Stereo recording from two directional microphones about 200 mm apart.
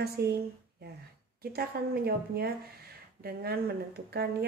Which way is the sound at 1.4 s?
50° right (ahead or behind).